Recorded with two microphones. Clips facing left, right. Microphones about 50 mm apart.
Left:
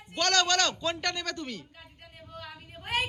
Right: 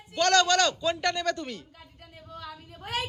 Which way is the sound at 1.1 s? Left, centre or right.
Centre.